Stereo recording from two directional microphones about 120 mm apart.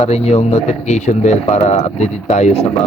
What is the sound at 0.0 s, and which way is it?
Speech, 60° left (ahead or behind).